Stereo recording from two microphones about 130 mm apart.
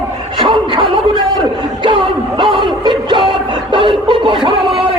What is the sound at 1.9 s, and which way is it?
Music, 40° right (ahead or behind).